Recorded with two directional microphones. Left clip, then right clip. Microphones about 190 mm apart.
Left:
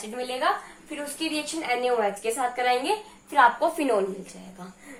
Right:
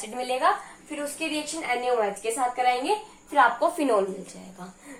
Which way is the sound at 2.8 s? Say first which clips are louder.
Right 1 dB; centre (ahead or behind).